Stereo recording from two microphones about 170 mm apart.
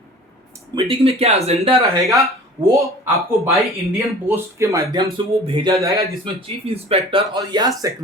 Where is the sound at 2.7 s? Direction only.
15° right (ahead or behind).